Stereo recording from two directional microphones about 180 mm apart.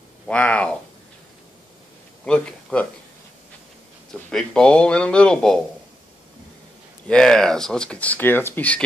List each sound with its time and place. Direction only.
0.3 s speech: 5° left (ahead or behind)
2.2 s speech: 5° left (ahead or behind)
4.1 s speech: 5° left (ahead or behind)
7.1 s speech: 5° left (ahead or behind)